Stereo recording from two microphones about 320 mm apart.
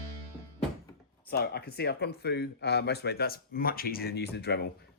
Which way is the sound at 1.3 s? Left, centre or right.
Left.